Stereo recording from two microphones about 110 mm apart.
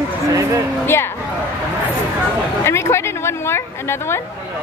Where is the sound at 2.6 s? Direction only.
25° left (ahead or behind).